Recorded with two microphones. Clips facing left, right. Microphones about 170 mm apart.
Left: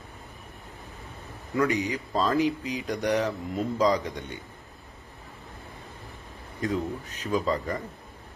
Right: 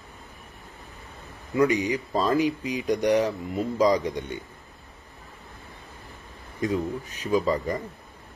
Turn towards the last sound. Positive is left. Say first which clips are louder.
# right 3 dB
turn(degrees=-15)  # may be behind; listen again after turning